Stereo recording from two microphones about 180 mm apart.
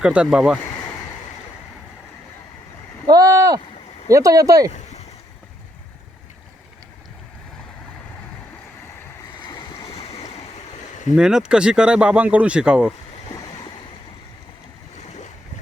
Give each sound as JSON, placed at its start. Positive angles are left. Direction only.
{"t": 0.0, "sound": "speech", "side_deg": -5}
{"t": 3.1, "sound": "vehicle", "side_deg": -20}
{"t": 4.1, "sound": "speech", "side_deg": -20}
{"t": 4.7, "sound": "a sound", "side_deg": 40}
{"t": 9.4, "sound": "a sound", "side_deg": 25}
{"t": 9.9, "sound": "waves", "side_deg": 35}
{"t": 11.2, "sound": "speech", "side_deg": -5}
{"t": 13.3, "sound": "a sound", "side_deg": 25}
{"t": 14.9, "sound": "boat", "side_deg": 40}